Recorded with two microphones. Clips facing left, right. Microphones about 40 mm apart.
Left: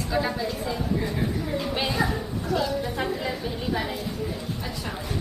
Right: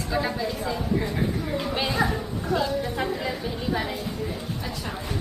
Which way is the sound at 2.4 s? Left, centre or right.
Right.